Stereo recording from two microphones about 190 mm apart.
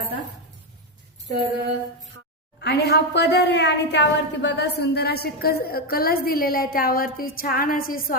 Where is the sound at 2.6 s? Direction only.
60° left (ahead or behind).